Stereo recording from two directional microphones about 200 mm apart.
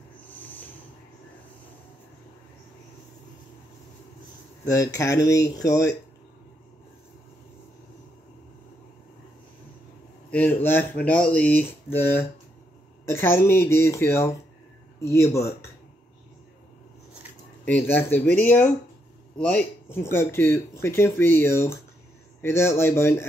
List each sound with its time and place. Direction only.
0.3 s a sound: 10° left (ahead or behind)
4.6 s speech: 15° left (ahead or behind)
10.3 s speech: 10° left (ahead or behind)
17.6 s speech: 10° left (ahead or behind)